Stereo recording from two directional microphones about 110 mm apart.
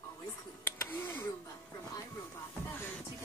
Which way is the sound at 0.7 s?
20° left (ahead or behind).